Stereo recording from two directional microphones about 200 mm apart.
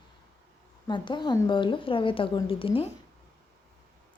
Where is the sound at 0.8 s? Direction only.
25° left (ahead or behind).